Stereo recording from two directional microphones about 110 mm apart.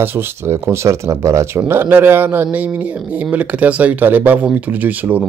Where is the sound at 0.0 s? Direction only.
20° right (ahead or behind).